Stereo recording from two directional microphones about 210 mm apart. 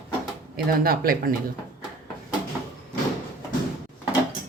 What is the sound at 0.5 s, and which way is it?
Speech, 45° right (ahead or behind).